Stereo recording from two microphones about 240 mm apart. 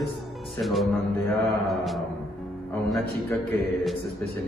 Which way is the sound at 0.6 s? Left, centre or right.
Centre.